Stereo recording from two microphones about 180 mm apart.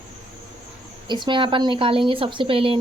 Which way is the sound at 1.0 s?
25° right (ahead or behind).